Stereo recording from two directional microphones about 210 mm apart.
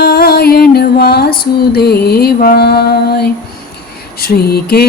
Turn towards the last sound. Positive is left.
turn(degrees=45)  # may be behind; listen again after turning